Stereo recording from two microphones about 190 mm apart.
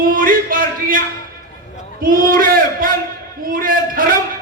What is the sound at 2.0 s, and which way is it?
A man's voice, 45° right (ahead or behind).